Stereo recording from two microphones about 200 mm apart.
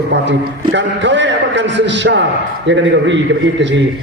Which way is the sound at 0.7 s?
65° right (ahead or behind).